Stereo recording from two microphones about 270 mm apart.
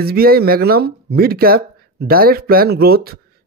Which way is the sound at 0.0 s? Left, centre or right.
Right.